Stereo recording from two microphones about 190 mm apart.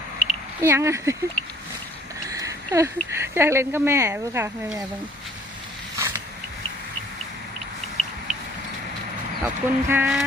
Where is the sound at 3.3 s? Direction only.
15° right (ahead or behind).